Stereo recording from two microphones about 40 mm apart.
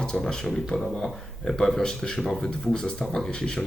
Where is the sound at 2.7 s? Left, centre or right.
Centre.